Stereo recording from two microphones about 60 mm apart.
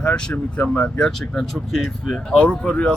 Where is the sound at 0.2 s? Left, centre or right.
Centre.